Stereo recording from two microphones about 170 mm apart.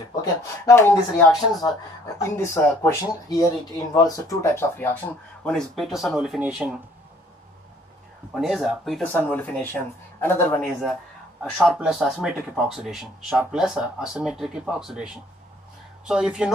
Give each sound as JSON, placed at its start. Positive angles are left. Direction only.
{"t": 0.1, "sound": "speech", "side_deg": 20}
{"t": 5.4, "sound": "speech", "side_deg": 0}
{"t": 8.4, "sound": "speech", "side_deg": 0}
{"t": 11.5, "sound": "speech", "side_deg": 0}